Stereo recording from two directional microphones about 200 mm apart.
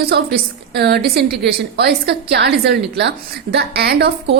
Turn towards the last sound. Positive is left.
turn(degrees=-50)  # may be behind; listen again after turning